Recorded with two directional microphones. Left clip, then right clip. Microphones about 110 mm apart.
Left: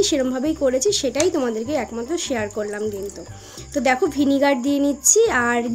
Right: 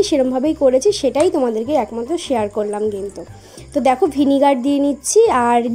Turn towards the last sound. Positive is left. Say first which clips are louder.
# right 5 dB
turn(degrees=-30)  # may be behind; listen again after turning